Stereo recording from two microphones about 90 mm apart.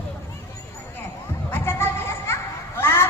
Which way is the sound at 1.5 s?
30° left (ahead or behind).